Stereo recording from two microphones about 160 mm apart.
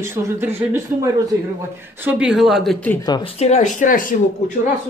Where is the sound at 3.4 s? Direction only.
45° left (ahead or behind).